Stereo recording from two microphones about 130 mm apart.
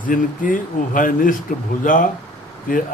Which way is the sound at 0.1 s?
90° left.